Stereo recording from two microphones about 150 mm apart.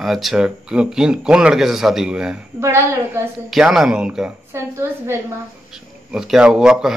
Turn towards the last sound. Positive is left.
turn(degrees=-5)  # may be behind; listen again after turning